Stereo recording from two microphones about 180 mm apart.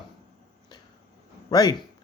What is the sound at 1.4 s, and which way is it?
Speech, 20° left (ahead or behind).